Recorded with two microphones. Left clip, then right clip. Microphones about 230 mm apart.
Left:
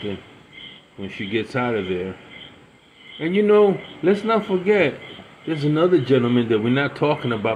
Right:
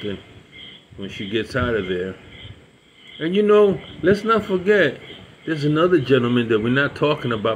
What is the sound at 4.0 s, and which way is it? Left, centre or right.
Speech, left.